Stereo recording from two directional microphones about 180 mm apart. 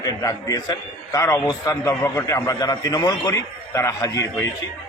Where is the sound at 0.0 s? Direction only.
20° left (ahead or behind).